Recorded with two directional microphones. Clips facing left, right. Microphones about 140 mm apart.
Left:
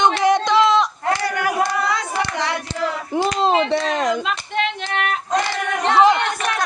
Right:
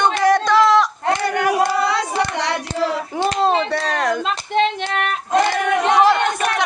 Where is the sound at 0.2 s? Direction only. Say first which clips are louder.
Right 1 dB; 20° left (ahead or behind).